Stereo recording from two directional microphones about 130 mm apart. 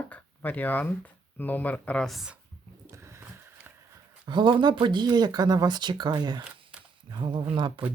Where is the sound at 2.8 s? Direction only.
20° right (ahead or behind).